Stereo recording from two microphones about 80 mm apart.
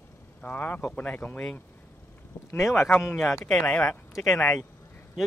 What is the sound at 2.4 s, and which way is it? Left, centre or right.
Speech, left.